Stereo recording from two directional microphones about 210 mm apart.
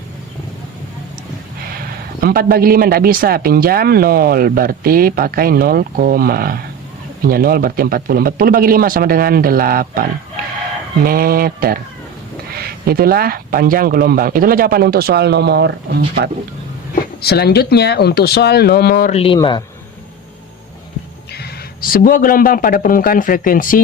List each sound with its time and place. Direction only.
2.2 s speech: 45° right (ahead or behind)
16.9 s speech: 50° left (ahead or behind)
19.1 s speech: 25° left (ahead or behind)
21.3 s speech: 45° left (ahead or behind)